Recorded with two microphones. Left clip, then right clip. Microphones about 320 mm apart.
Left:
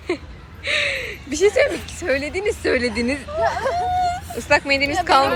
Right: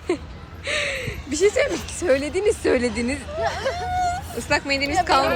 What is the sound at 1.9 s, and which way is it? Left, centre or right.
Speech, centre.